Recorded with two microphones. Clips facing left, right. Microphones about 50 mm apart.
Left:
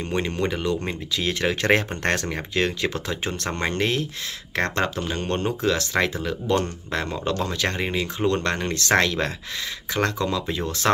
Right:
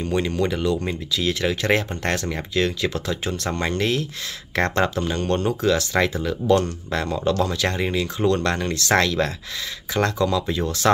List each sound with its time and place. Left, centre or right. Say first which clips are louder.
0.0 s speech: right 3 dB; left
4.9 s speech: right 3 dB; centre